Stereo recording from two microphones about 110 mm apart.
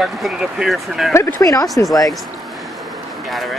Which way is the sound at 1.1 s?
25° left (ahead or behind).